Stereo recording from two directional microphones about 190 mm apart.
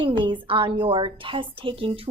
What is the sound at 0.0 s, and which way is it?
A woman's voice, 25° right (ahead or behind).